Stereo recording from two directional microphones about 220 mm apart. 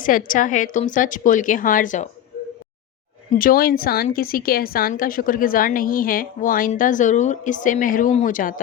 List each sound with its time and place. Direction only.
0.0 s a woman's voice: 40° left (ahead or behind)
3.3 s a woman's voice: 40° left (ahead or behind)